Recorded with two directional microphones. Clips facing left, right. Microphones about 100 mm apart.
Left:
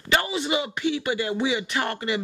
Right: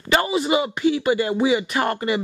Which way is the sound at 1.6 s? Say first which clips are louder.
Right 4 dB; 20° right (ahead or behind).